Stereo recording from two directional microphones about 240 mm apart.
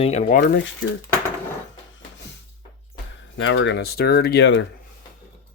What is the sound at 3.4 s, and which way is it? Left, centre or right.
Speech, left.